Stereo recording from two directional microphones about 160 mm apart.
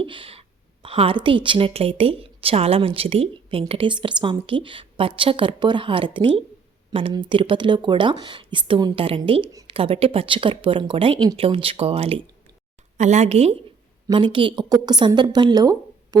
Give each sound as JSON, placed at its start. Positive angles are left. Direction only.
{"t": 0.0, "sound": "a woman's voice", "side_deg": -30}
{"t": 14.3, "sound": "a woman's voice", "side_deg": -30}